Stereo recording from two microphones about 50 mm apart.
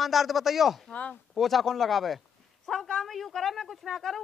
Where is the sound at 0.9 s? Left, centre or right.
Left.